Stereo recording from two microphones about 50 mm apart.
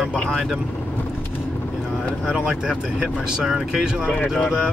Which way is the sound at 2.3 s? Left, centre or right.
Centre.